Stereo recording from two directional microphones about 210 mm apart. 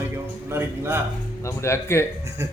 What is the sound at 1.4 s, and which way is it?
Speech, 15° left (ahead or behind).